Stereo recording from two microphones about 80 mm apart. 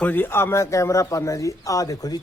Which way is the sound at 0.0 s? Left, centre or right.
Left.